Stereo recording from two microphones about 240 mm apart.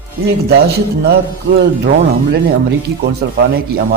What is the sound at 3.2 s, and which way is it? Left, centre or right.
Speech, right.